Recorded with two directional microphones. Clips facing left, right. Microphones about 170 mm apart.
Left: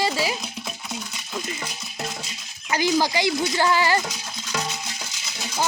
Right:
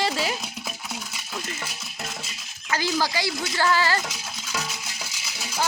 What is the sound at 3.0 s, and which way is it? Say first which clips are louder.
Speech: left 4 dB; 20° left (ahead or behind).